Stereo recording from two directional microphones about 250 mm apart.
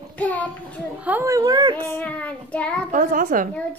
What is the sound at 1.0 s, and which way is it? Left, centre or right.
Speech, centre.